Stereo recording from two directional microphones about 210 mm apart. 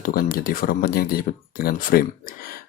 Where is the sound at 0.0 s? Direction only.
45° left (ahead or behind).